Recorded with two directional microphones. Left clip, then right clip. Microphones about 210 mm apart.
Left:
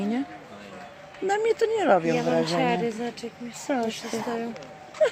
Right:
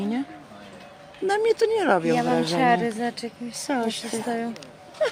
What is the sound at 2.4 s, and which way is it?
Speech, 45° right (ahead or behind).